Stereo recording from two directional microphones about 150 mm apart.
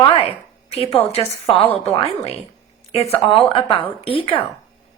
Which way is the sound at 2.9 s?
40° left (ahead or behind).